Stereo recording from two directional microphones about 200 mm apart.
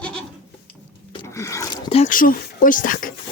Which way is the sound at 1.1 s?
15° left (ahead or behind).